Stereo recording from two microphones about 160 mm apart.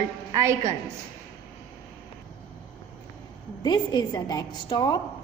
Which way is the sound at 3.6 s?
25° left (ahead or behind).